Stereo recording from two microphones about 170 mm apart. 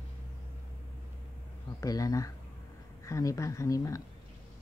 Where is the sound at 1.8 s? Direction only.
20° left (ahead or behind).